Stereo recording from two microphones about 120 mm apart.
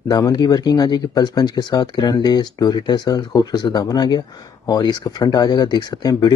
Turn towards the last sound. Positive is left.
turn(degrees=35)  # may be behind; listen again after turning